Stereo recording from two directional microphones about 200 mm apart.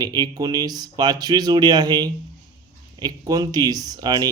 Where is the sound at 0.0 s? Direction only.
20° right (ahead or behind).